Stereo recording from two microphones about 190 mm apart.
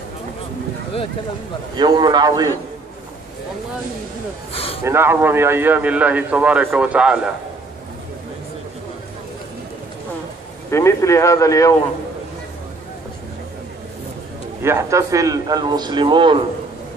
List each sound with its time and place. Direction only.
1.8 s a man's voice: 20° right (ahead or behind)
4.8 s a man's voice: 10° right (ahead or behind)
10.7 s speech: 15° left (ahead or behind)
14.6 s a man's voice: 15° right (ahead or behind)